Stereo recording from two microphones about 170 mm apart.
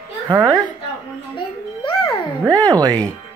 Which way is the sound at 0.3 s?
20° right (ahead or behind).